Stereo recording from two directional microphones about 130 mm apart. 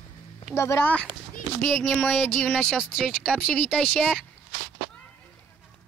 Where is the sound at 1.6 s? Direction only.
15° left (ahead or behind).